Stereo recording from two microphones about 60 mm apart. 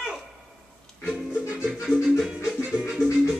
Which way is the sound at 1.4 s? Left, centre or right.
Centre.